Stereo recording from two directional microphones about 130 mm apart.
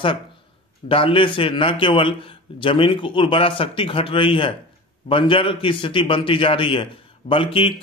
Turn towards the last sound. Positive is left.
turn(degrees=40)  # may be behind; listen again after turning